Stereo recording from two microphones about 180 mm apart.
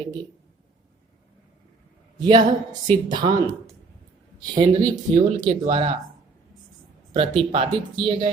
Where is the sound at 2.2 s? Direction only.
25° right (ahead or behind).